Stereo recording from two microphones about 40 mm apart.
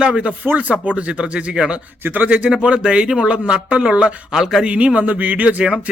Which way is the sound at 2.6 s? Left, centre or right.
Right.